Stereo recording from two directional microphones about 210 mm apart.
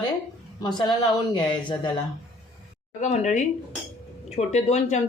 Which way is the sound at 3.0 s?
35° left (ahead or behind).